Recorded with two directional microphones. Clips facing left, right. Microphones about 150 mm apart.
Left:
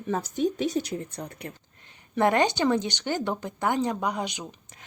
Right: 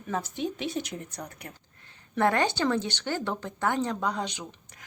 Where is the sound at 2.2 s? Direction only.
20° left (ahead or behind).